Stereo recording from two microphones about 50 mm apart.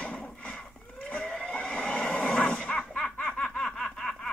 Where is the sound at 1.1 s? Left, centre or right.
Left.